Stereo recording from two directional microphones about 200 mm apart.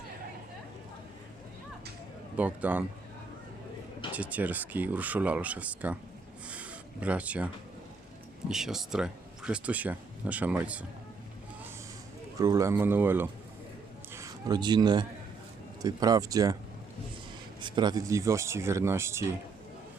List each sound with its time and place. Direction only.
2.3 s speech: 5° right (ahead or behind)
4.1 s speech: 5° right (ahead or behind)
6.5 s a sound: 5° right (ahead or behind)
8.4 s speech: centre (ahead or behind)
12.4 s a man's voice: 15° right (ahead or behind)
17.6 s speech: 25° right (ahead or behind)